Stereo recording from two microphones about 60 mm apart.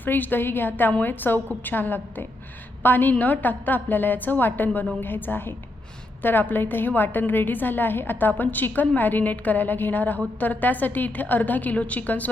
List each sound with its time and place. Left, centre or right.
0.0 s a woman's voice: left